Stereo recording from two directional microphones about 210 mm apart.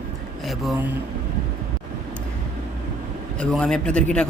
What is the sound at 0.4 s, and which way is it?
Speech, centre (ahead or behind).